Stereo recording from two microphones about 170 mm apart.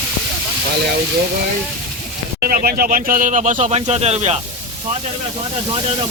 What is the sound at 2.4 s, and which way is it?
Speech, 60° right (ahead or behind).